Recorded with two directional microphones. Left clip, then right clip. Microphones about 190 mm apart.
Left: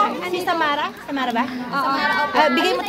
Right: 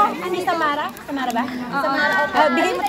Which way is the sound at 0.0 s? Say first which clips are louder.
Right 1 dB; 30° left (ahead or behind).